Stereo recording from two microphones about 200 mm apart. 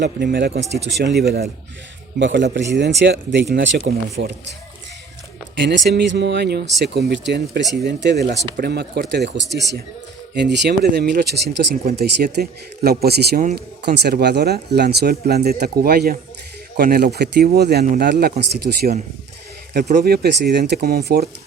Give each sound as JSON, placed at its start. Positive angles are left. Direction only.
{"t": 0.0, "sound": "speech", "side_deg": -55}
{"t": 5.5, "sound": "speech", "side_deg": -60}
{"t": 20.0, "sound": "speech", "side_deg": -55}